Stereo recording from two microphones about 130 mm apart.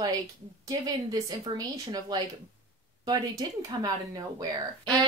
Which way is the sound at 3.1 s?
30° right (ahead or behind).